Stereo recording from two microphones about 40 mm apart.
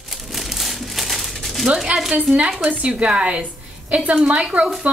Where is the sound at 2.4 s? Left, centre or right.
Right.